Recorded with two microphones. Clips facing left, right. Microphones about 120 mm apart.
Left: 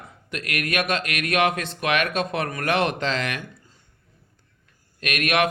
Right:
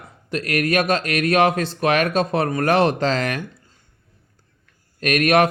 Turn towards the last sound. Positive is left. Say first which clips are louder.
# right 6 dB
turn(degrees=-40)  # may be behind; listen again after turning